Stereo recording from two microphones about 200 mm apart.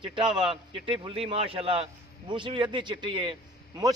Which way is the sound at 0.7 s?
25° right (ahead or behind).